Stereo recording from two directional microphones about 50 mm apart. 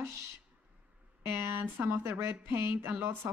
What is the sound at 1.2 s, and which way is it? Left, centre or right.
Speech, right.